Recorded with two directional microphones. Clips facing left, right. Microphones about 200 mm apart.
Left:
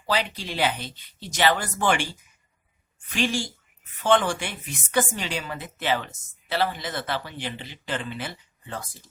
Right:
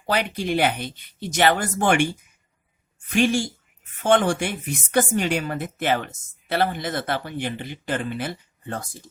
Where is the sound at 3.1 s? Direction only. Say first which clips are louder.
Right 6 dB; 50° right (ahead or behind).